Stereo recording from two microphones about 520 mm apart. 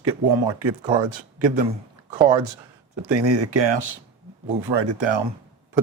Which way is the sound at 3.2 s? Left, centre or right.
Right.